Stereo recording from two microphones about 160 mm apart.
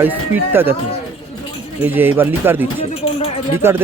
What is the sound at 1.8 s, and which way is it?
Speech, 15° right (ahead or behind).